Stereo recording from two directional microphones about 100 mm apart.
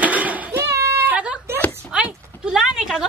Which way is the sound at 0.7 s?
30° right (ahead or behind).